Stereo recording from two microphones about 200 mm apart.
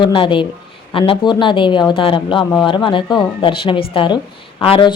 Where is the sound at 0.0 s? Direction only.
25° left (ahead or behind).